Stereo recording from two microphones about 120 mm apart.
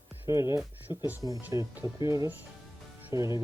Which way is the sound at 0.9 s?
15° right (ahead or behind).